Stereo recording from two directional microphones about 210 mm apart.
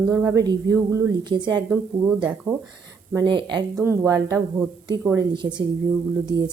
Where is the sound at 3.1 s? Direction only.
20° right (ahead or behind).